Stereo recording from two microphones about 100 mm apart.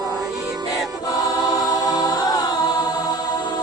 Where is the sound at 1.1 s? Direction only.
40° left (ahead or behind).